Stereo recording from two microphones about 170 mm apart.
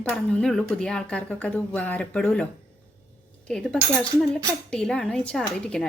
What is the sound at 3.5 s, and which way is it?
Speech, 5° left (ahead or behind).